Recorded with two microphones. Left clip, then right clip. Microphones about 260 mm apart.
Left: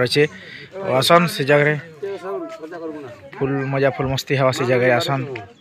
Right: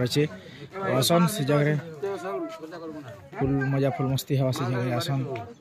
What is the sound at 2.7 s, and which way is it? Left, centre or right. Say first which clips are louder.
Speech: left 8 dB; left.